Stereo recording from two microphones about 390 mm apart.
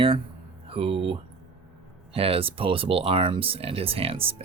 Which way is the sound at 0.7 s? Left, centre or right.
Centre.